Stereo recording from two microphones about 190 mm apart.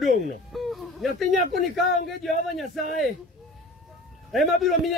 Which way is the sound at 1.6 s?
45° left (ahead or behind).